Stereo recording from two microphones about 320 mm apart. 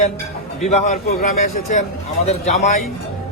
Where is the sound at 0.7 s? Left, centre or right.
Left.